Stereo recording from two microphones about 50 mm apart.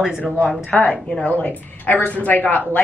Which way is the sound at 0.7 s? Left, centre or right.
Left.